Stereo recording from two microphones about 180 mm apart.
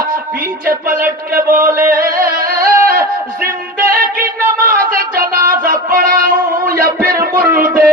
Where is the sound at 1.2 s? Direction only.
50° right (ahead or behind).